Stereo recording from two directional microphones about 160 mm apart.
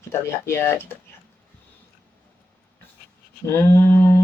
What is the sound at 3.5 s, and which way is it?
Speech, 15° left (ahead or behind).